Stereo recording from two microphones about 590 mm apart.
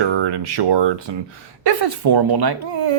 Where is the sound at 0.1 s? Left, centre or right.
Right.